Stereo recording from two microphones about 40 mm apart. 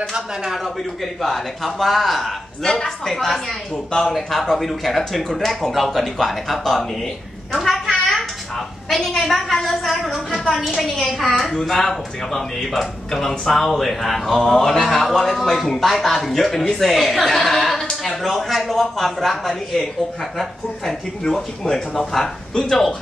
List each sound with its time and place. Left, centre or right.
0.1 s speech: centre
1.2 s speech: centre
2.6 s speech: centre
7.5 s a sound: centre
10.4 s a woman's voice: centre
21.6 s speech: centre